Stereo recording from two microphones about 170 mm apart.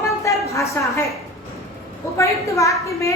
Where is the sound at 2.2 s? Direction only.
15° left (ahead or behind).